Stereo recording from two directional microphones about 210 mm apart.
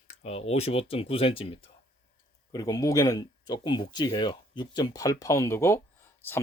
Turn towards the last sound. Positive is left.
turn(degrees=10)  # may be behind; listen again after turning